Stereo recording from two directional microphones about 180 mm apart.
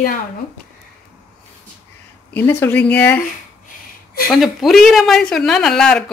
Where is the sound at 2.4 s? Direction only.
10° left (ahead or behind).